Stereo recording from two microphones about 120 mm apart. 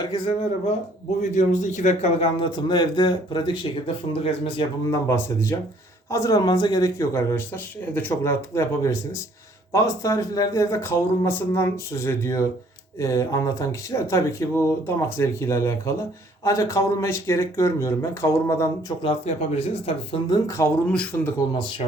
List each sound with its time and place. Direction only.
0.0 s speech: 40° left (ahead or behind)
1.3 s a man's voice: 90° left; by 4.6 s 50° left (ahead or behind)
4.9 s speech: 25° left (ahead or behind)
19.2 s speech: 65° left (ahead or behind)
20.3 s speech: 25° left (ahead or behind)
20.8 s speech: 10° left (ahead or behind)
21.6 s a man's voice: 45° left (ahead or behind)